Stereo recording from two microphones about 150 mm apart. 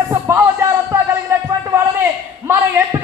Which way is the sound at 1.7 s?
20° right (ahead or behind).